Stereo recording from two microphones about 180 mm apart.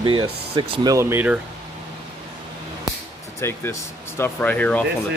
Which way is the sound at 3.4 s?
15° left (ahead or behind).